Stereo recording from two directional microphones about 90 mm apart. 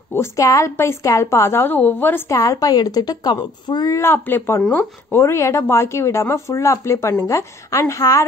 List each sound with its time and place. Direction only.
0.1 s a woman's voice: 30° left (ahead or behind)
2.3 s speech: 40° left (ahead or behind)
3.9 s a woman's voice: 25° left (ahead or behind)
5.1 s speech: 30° left (ahead or behind)